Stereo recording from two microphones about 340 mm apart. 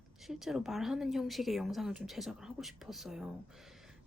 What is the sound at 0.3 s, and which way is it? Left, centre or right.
A woman's voice, centre.